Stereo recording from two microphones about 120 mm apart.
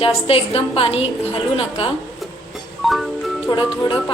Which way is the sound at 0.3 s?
50° left (ahead or behind).